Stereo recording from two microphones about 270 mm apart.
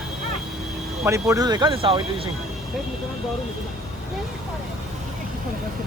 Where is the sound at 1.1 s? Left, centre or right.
Centre.